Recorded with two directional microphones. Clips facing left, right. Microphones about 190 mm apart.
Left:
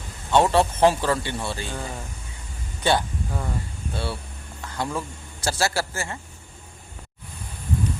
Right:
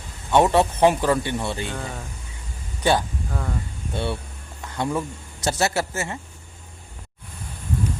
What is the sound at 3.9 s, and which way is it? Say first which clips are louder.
Speech: right 4 dB; 25° right (ahead or behind).